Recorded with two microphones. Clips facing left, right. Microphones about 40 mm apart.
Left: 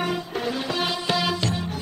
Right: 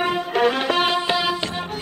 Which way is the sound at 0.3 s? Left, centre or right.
Right.